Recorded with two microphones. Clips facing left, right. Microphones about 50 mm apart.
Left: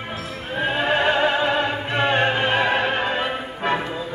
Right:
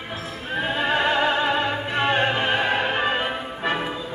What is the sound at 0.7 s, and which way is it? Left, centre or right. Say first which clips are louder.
Opera: left 2 dB; left.